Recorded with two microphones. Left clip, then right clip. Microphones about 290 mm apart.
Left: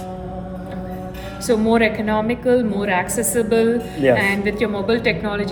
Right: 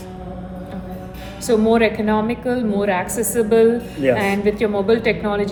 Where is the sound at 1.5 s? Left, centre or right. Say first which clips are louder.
Right 1 dB; centre.